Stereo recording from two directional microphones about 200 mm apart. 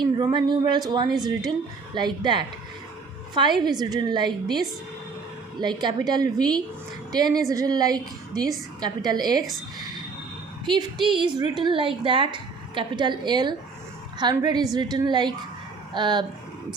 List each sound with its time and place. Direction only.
0.0 s a woman's voice: 20° right (ahead or behind)
10.7 s a woman's voice: 25° right (ahead or behind)